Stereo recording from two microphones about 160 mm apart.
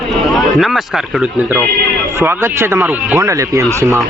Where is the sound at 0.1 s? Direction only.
Centre (ahead or behind).